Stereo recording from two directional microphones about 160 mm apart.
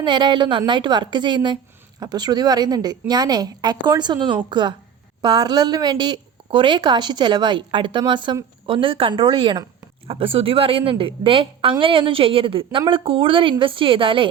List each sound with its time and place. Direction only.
0.0 s a woman's voice: 30° right (ahead or behind)